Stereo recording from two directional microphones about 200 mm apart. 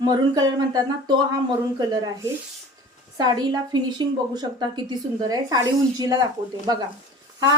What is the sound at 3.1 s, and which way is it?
Speech, 20° right (ahead or behind).